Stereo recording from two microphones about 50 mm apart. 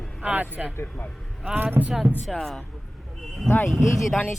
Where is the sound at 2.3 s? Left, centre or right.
Centre.